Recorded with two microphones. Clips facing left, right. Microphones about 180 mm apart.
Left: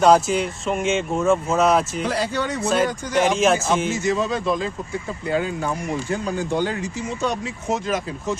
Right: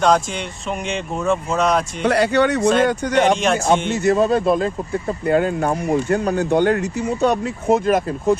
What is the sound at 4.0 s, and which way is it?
Speech, 60° right (ahead or behind).